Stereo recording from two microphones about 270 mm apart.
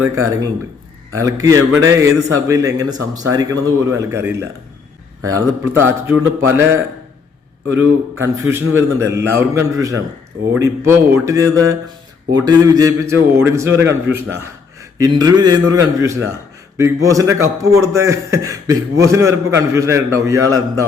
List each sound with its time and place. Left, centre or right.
0.0 s speech: centre
8.2 s speech: centre